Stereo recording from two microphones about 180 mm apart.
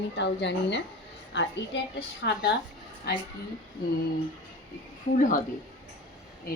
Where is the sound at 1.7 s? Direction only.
90° left.